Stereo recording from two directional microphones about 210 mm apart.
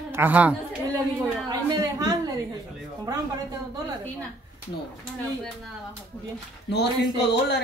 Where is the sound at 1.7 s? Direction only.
20° right (ahead or behind).